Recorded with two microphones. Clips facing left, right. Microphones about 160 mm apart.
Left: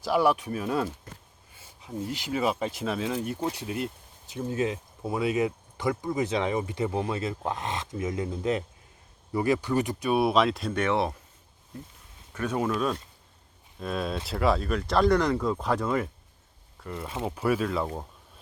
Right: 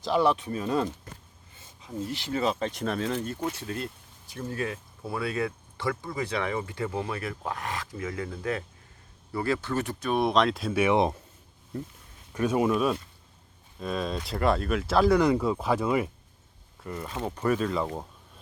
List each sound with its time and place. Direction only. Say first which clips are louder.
0.0 s speech: even; 10° left (ahead or behind)
1.5 s a sound: even; 10° left (ahead or behind)
2.0 s speech: left 1 dB; 15° left (ahead or behind); by 11.1 s 15° right (ahead or behind)
12.3 s speech: right 4 dB; 15° right (ahead or behind)
13.7 s speech: even; centre (ahead or behind)